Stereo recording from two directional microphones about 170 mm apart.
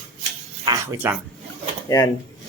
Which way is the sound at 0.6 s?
15° right (ahead or behind).